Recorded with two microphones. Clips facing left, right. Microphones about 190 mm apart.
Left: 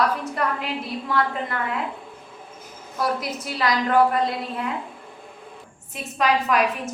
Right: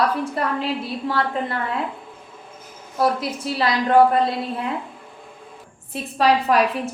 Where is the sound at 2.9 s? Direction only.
30° right (ahead or behind).